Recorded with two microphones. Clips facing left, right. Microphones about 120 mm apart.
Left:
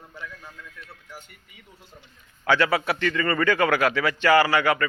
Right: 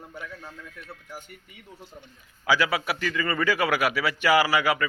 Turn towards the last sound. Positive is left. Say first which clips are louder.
# left 2 dB
turn(degrees=-10)  # may be behind; listen again after turning